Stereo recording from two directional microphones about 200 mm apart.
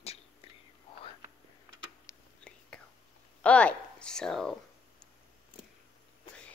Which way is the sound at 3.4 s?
5° left (ahead or behind).